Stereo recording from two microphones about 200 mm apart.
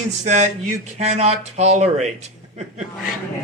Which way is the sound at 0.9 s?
35° right (ahead or behind).